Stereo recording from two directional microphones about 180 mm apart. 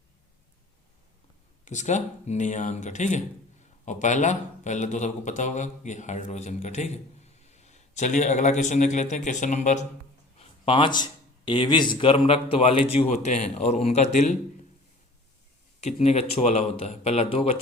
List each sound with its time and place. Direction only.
1.6 s a man's voice: 40° left (ahead or behind)
15.8 s a man's voice: 35° left (ahead or behind)